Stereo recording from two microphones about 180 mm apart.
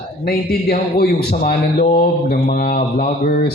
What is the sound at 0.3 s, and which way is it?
A man's voice, 60° left (ahead or behind).